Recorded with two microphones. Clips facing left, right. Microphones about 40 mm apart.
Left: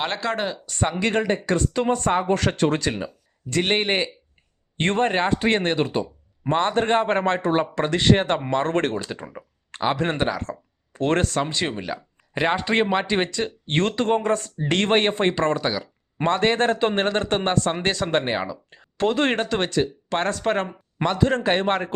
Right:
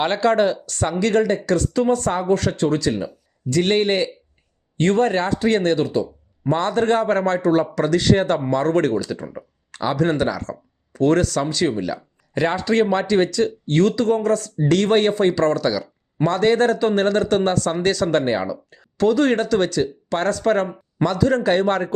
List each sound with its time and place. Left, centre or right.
0.0 s speech: centre
0.6 s speech: left
3.6 s speech: left